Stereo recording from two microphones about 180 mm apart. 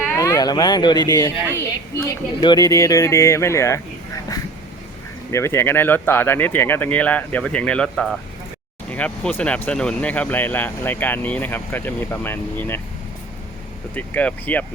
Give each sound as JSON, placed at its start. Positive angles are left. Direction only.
{"t": 0.1, "sound": "speech", "side_deg": 20}
{"t": 5.3, "sound": "speech", "side_deg": 15}
{"t": 13.9, "sound": "speech", "side_deg": 10}